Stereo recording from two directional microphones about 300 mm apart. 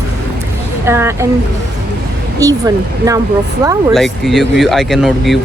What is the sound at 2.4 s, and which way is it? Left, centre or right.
Speech, centre.